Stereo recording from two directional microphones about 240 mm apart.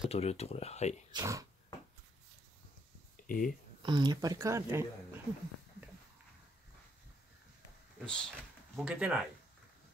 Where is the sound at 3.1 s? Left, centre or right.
Left.